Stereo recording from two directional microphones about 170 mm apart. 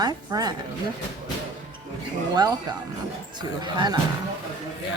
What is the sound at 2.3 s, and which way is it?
Speech, 25° right (ahead or behind).